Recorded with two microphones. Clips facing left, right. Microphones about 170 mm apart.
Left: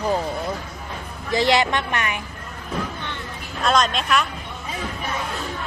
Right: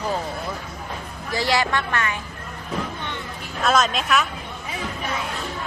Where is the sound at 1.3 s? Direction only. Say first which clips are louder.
Left 3 dB; 20° left (ahead or behind).